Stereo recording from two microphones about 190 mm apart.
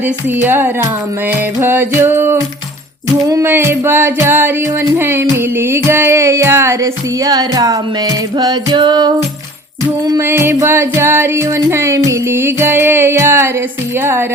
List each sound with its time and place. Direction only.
0.3 s music: 10° right (ahead or behind)